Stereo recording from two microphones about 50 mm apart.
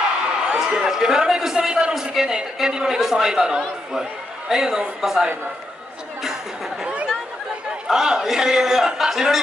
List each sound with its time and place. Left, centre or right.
0.5 s a man's voice: centre
6.8 s chatter: right
7.9 s a man's voice: centre